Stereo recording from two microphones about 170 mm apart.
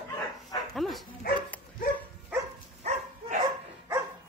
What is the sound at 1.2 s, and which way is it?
Dog, 60° left (ahead or behind).